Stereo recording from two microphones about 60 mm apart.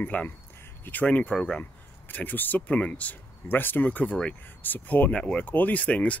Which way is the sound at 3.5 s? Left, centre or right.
Left.